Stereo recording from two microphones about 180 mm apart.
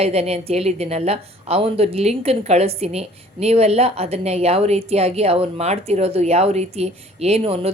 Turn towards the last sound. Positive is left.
turn(degrees=-35)  # may be behind; listen again after turning